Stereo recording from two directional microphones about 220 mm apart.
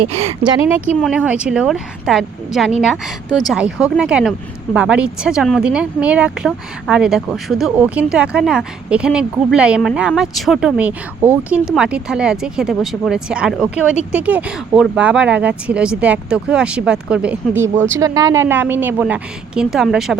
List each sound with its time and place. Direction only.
0.1 s speech: 30° right (ahead or behind)
0.9 s a woman's voice: centre (ahead or behind)